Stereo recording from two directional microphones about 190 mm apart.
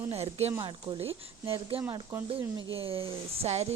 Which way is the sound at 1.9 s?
15° right (ahead or behind).